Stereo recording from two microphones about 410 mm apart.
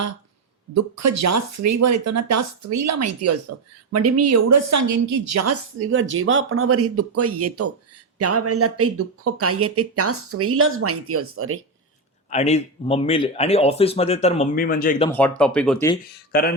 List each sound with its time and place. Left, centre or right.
0.7 s a woman's voice: right
12.3 s speech: centre
16.3 s speech: left